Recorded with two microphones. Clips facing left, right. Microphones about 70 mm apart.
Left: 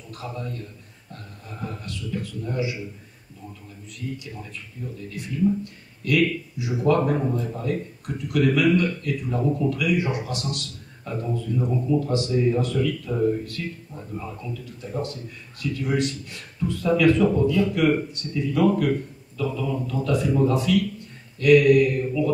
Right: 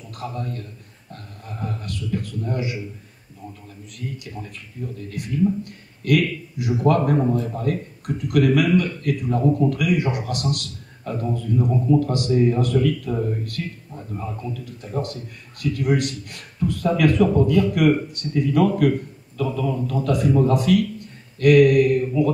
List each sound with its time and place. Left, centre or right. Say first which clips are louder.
0.2 s speech: right 3 dB; right
4.9 s speech: right 4 dB; right